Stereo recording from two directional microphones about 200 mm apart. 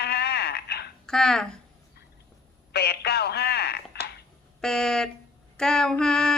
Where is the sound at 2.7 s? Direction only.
55° left (ahead or behind).